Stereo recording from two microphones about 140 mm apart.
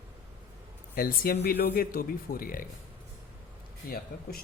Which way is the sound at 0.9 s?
90° left.